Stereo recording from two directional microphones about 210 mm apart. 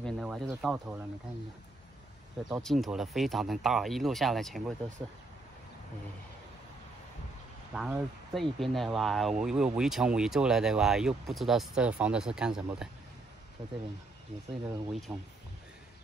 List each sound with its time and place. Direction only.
0.0 s speech: 5° right (ahead or behind)
2.4 s speech: centre (ahead or behind)
7.7 s speech: centre (ahead or behind)
13.6 s speech: 20° right (ahead or behind)
15.1 s speech: 5° right (ahead or behind)